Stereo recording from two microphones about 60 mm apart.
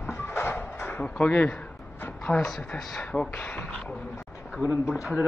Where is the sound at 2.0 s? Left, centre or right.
Left.